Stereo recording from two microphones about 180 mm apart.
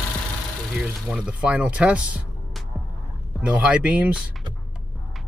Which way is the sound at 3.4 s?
5° right (ahead or behind).